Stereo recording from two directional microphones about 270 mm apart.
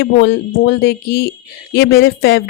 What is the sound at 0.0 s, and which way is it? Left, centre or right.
Speech, left.